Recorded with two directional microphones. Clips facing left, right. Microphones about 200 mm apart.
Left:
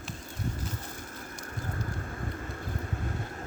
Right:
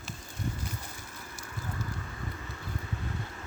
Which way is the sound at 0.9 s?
50° left (ahead or behind).